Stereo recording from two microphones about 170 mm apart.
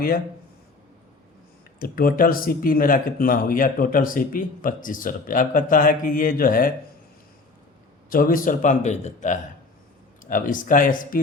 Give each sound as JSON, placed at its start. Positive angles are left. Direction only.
{"t": 1.8, "sound": "speech", "side_deg": 60}
{"t": 8.1, "sound": "speech", "side_deg": 55}